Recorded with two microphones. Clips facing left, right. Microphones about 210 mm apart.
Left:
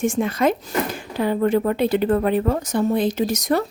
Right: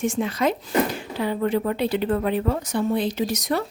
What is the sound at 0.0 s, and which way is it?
A woman's voice, 50° left (ahead or behind).